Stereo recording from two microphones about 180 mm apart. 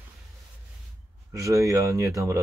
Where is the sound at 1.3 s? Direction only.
15° right (ahead or behind).